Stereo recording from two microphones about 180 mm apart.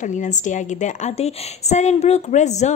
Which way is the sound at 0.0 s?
45° left (ahead or behind).